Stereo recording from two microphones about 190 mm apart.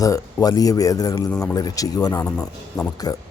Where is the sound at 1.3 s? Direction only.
5° left (ahead or behind).